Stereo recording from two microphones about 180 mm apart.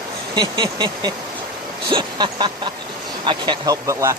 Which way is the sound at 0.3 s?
25° right (ahead or behind).